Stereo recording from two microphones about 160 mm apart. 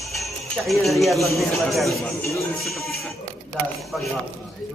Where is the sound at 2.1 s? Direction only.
20° left (ahead or behind).